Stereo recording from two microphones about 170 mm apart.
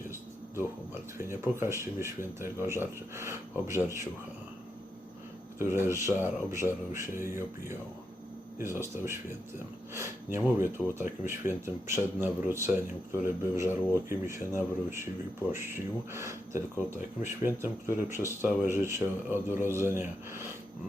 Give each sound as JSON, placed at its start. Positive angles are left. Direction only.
{"t": 1.3, "sound": "speech", "side_deg": -15}
{"t": 5.5, "sound": "speech", "side_deg": -15}